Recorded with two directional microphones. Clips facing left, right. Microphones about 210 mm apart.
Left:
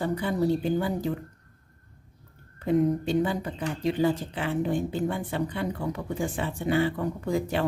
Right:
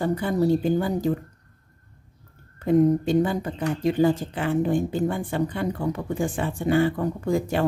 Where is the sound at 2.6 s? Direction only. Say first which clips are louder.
Right 5 dB; 45° right (ahead or behind).